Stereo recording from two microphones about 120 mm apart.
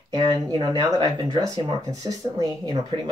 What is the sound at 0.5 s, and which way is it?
Speech, 35° right (ahead or behind).